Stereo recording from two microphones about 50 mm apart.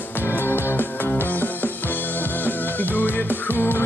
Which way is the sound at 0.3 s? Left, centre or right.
Left.